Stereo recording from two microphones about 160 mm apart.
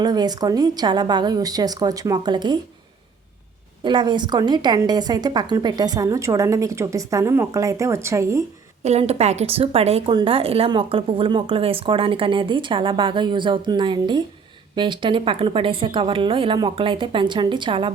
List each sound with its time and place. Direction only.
0.0 s a woman's voice: 25° right (ahead or behind)
3.8 s a woman's voice: 30° right (ahead or behind)
8.8 s a woman's voice: 40° right (ahead or behind)